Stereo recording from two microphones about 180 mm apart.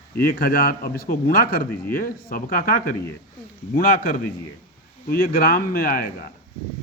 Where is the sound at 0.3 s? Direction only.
55° left (ahead or behind).